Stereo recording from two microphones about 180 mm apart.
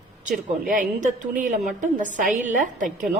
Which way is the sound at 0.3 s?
45° right (ahead or behind).